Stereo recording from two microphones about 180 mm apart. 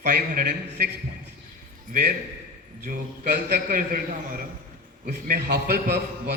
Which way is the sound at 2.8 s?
50° right (ahead or behind).